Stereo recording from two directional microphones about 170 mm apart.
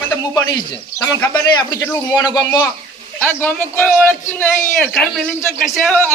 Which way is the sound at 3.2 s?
10° left (ahead or behind).